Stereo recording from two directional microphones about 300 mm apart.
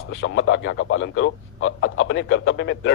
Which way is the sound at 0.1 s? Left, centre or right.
Left.